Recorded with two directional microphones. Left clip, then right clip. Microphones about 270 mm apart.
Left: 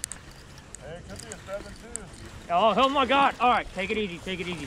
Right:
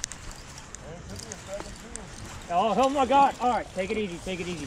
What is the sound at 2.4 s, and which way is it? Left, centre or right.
Speech, left.